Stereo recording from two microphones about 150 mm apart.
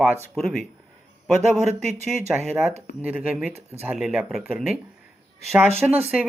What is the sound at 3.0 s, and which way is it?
Speech, 10° right (ahead or behind).